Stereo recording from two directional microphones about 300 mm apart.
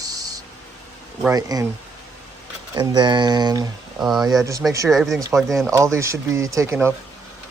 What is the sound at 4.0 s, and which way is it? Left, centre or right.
Speech, centre.